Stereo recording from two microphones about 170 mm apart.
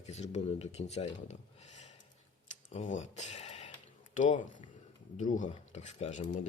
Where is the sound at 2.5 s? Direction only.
40° left (ahead or behind).